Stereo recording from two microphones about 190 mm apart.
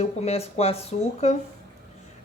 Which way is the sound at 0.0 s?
35° left (ahead or behind).